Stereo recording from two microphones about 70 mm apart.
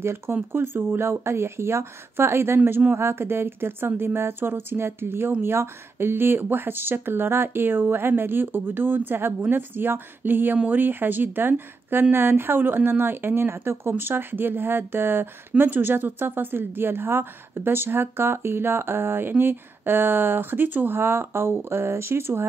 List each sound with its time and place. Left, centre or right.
0.0 s speech: right